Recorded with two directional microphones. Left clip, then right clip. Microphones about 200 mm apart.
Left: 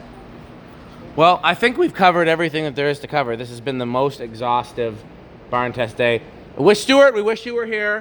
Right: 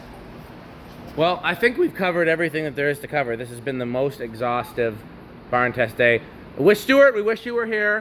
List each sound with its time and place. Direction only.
1.1 s a man's voice: 30° left (ahead or behind)
4.4 s a man's voice: 10° left (ahead or behind)
7.3 s speech: centre (ahead or behind)